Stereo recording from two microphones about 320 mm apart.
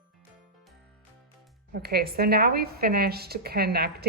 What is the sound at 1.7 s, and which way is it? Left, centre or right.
Speech, right.